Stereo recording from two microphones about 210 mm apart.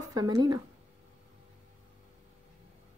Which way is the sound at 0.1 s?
20° right (ahead or behind).